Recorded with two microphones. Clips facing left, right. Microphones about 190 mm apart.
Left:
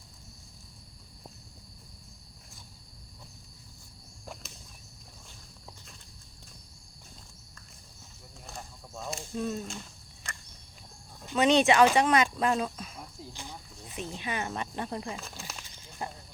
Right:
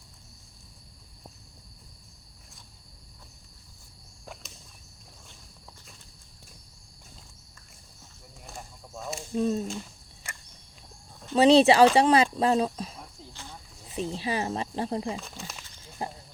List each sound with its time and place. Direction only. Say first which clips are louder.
8.4 s a sound: right 1 dB; centre (ahead or behind)
9.3 s speech: right 7 dB; 30° right (ahead or behind)
10.3 s cricket: even; 10° right (ahead or behind)
11.3 s speech: right 5 dB; 35° right (ahead or behind)
13.3 s snake: even; 15° left (ahead or behind)
13.9 s speech: right 6 dB; 30° right (ahead or behind)
15.1 s speech: right 4 dB; centre (ahead or behind)
16.0 s snake: right 3 dB; 25° right (ahead or behind)